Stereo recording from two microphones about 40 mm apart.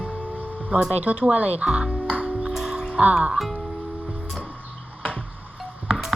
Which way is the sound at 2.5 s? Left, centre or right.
Centre.